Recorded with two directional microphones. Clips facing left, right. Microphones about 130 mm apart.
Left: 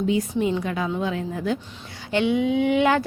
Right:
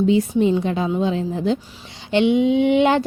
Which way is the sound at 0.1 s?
25° right (ahead or behind).